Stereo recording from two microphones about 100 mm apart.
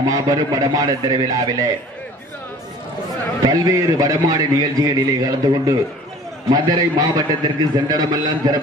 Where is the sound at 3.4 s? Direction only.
35° right (ahead or behind).